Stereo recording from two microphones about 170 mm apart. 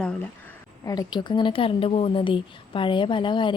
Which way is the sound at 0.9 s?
25° left (ahead or behind).